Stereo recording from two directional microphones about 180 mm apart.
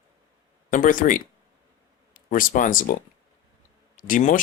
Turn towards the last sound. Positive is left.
turn(degrees=50)  # may be behind; listen again after turning